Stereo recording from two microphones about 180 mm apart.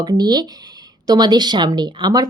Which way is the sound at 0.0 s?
20° right (ahead or behind).